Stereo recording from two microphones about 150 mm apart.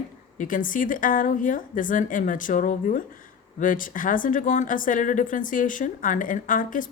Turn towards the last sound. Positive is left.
turn(degrees=65)  # may be behind; listen again after turning